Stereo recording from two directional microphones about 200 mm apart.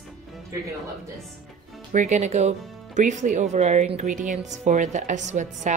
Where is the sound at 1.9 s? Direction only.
35° right (ahead or behind).